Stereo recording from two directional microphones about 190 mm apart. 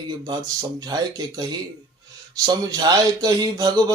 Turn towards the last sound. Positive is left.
turn(degrees=-20)  # may be behind; listen again after turning